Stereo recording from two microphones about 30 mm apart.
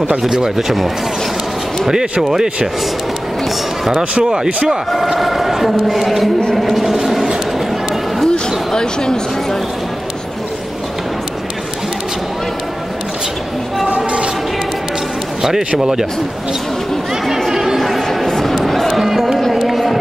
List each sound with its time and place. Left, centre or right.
0.2 s speech: centre
0.6 s speech: centre
1.9 s speech: centre
5.2 s speech: centre
6.5 s a sound: centre
6.8 s a sound: centre
8.7 s speech: left
13.8 s a sound: right
15.8 s speech: centre
17.5 s music: centre
17.7 s a sound: centre
18.6 s run: centre